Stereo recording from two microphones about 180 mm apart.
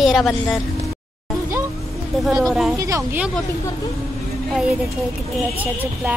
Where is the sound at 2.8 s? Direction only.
20° right (ahead or behind).